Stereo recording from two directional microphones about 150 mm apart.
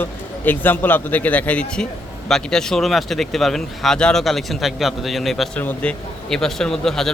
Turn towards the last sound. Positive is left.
turn(degrees=5)  # may be behind; listen again after turning